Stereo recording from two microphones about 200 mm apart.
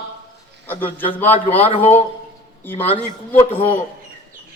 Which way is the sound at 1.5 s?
30° left (ahead or behind).